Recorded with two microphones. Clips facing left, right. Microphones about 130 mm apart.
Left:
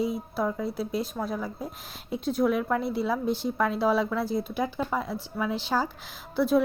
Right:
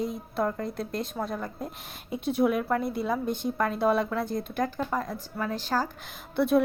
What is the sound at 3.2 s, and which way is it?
Speech, 50° right (ahead or behind).